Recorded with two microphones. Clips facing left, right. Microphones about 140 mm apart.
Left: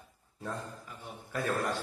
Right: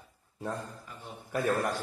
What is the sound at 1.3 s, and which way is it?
Speech, 15° right (ahead or behind).